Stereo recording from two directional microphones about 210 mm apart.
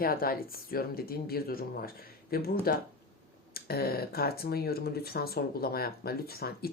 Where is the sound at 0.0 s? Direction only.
45° left (ahead or behind).